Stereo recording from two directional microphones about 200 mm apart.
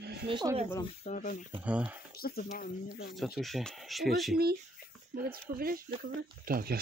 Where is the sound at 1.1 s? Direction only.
40° left (ahead or behind).